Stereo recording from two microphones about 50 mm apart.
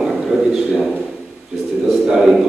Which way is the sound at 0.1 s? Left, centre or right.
Centre.